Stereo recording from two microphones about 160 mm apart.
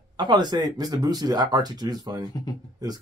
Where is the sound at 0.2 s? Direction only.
25° right (ahead or behind).